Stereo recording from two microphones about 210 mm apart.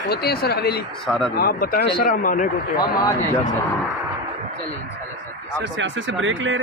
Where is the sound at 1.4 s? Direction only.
45° left (ahead or behind).